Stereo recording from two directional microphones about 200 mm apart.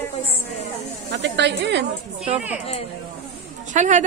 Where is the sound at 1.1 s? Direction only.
60° right (ahead or behind).